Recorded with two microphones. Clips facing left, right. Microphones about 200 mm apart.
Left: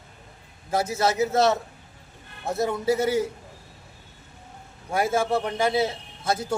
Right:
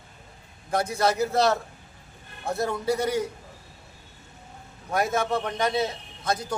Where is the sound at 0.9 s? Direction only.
5° left (ahead or behind).